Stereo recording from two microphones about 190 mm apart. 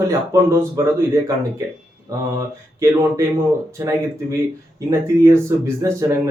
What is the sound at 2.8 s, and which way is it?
Speech, 15° right (ahead or behind).